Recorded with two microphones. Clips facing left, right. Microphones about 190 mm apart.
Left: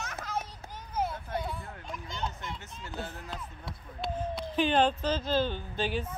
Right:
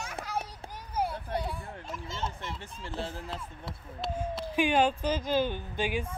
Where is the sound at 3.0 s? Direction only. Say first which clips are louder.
Right 3 dB; 30° right (ahead or behind).